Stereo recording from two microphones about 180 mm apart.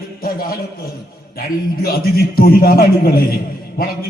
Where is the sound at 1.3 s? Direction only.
55° left (ahead or behind).